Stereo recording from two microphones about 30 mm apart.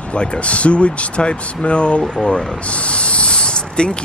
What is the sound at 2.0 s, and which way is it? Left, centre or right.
Speech, left.